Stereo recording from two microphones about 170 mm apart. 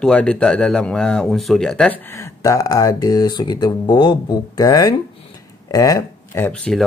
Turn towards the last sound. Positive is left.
turn(degrees=5)  # may be behind; listen again after turning